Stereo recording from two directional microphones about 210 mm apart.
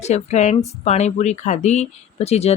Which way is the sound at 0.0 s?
30° left (ahead or behind).